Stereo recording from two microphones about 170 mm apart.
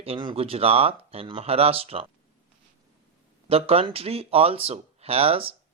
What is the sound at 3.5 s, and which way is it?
Speech, 35° right (ahead or behind).